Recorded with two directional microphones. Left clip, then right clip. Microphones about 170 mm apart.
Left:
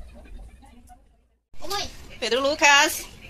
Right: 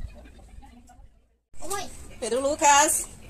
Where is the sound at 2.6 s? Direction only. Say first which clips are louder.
Left 2 dB; centre (ahead or behind).